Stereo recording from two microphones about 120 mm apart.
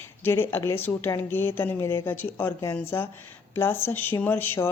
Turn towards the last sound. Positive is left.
turn(degrees=20)  # may be behind; listen again after turning